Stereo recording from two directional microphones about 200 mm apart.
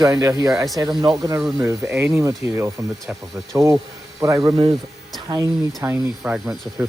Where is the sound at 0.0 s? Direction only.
15° right (ahead or behind).